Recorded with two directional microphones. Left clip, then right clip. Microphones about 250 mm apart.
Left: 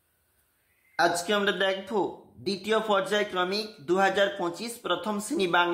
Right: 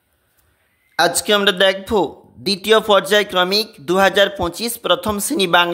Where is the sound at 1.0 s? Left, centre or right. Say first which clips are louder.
Right 9 dB; right.